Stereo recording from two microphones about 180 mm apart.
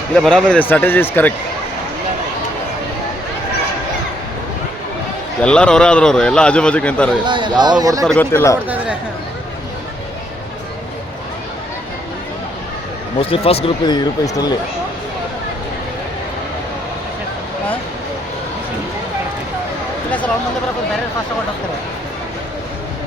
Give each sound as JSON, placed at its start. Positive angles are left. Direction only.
{"t": 0.1, "sound": "speech", "side_deg": 5}
{"t": 5.4, "sound": "a man's voice", "side_deg": 5}
{"t": 7.3, "sound": "speech", "side_deg": -25}
{"t": 8.0, "sound": "speech", "side_deg": 10}
{"t": 8.5, "sound": "speech", "side_deg": -10}
{"t": 13.1, "sound": "speech", "side_deg": 30}
{"t": 20.1, "sound": "a sound", "side_deg": 10}